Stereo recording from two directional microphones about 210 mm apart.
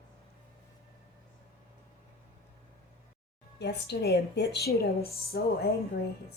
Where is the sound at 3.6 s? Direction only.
50° left (ahead or behind).